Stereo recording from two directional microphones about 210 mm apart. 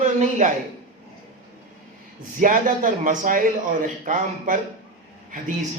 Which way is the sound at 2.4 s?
40° right (ahead or behind).